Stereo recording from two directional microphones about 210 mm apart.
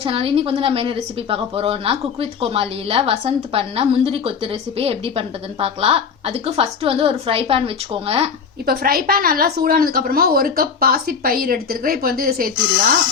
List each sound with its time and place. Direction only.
0.0 s a woman's voice: 25° right (ahead or behind)
8.6 s a woman's voice: 45° right (ahead or behind)